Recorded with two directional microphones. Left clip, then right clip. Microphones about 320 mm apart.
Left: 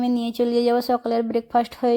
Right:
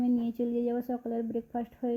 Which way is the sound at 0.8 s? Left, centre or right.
Left.